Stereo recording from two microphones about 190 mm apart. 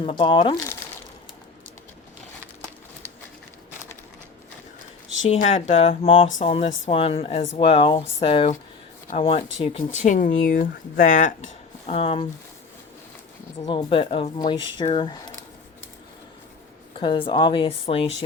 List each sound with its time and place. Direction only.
0.0 s speech: 25° left (ahead or behind)
5.2 s speech: 40° left (ahead or behind)
13.6 s speech: 25° left (ahead or behind)
17.0 s speech: 25° left (ahead or behind)